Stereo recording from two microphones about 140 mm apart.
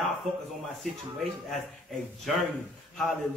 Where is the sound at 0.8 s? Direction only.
Centre (ahead or behind).